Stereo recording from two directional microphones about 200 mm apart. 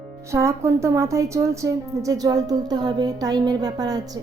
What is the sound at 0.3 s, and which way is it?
A woman's voice, 15° right (ahead or behind).